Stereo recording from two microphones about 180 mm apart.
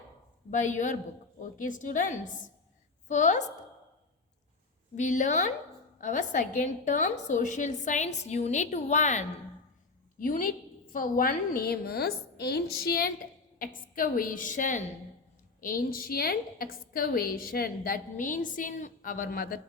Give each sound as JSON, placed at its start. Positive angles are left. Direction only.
{"t": 0.5, "sound": "a woman's voice", "side_deg": 45}
{"t": 4.9, "sound": "a woman's voice", "side_deg": 45}